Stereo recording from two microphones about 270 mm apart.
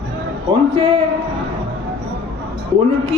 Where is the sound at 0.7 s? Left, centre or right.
Centre.